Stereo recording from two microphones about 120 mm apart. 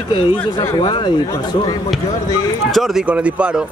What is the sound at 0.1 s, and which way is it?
Speech, 40° left (ahead or behind).